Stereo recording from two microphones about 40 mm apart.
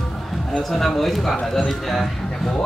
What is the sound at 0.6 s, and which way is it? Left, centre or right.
Speech, centre.